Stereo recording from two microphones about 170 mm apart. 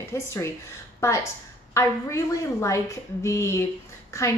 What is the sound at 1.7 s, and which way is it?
Speech, 15° left (ahead or behind).